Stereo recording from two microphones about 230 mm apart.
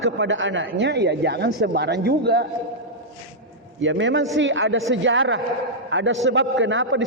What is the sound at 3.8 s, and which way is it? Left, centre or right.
A man's voice, right.